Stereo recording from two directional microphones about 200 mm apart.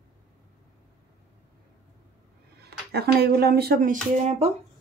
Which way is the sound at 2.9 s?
55° right (ahead or behind).